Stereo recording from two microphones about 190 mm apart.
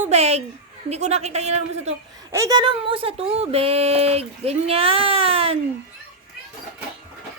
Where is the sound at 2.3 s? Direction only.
15° right (ahead or behind).